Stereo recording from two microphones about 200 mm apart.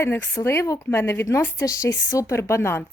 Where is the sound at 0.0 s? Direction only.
10° left (ahead or behind).